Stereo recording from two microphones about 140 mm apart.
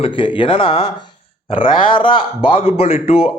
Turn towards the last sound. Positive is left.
turn(degrees=50)  # may be behind; listen again after turning